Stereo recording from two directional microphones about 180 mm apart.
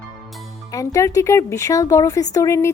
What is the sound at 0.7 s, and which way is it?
Speech, 20° left (ahead or behind).